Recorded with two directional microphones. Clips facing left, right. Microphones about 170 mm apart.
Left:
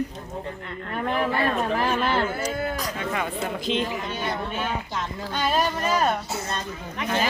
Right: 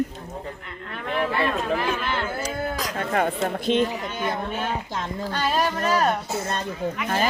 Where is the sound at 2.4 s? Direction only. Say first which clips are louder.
Even; 90° right.